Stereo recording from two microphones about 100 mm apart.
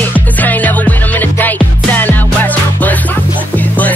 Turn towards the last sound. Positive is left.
turn(degrees=15)  # may be behind; listen again after turning